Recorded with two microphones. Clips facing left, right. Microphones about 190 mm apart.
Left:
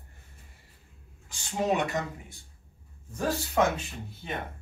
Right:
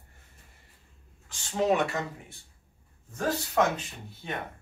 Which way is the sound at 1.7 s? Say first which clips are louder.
Right 1 dB; 15° left (ahead or behind).